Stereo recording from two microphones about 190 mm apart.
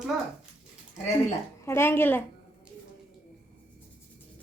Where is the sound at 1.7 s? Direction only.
10° left (ahead or behind).